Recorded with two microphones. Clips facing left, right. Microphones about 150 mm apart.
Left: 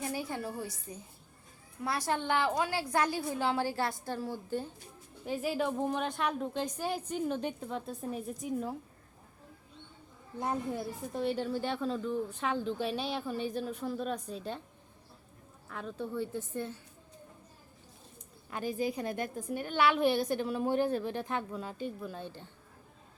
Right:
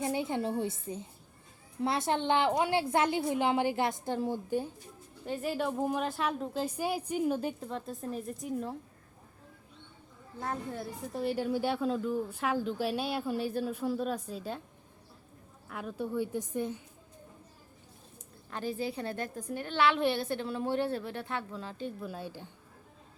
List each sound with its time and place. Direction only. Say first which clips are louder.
0.0 s a woman's voice: right 5 dB; 25° right (ahead or behind)
5.2 s a woman's voice: even; centre (ahead or behind)
10.4 s a woman's voice: left 3 dB; 15° left (ahead or behind)
10.8 s a woman's voice: left 1 dB; 5° right (ahead or behind)
15.7 s a woman's voice: right 3 dB; 10° right (ahead or behind)
18.8 s a woman's voice: left 2 dB; 15° left (ahead or behind)
22.0 s a woman's voice: right 1 dB; 5° right (ahead or behind)